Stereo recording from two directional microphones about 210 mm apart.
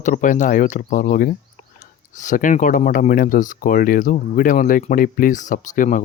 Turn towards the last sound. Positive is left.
turn(degrees=40)  # may be behind; listen again after turning